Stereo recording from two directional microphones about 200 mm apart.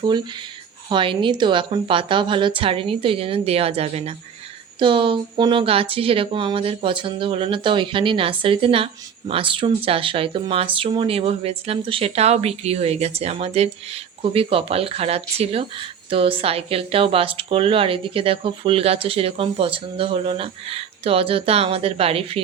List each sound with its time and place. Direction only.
0.9 s speech: 25° right (ahead or behind)